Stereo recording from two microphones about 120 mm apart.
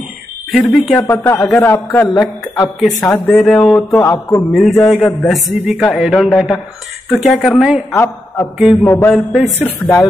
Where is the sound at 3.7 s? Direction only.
20° left (ahead or behind).